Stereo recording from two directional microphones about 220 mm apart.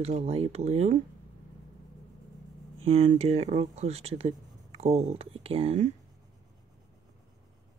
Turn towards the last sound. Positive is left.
turn(degrees=-30)  # may be behind; listen again after turning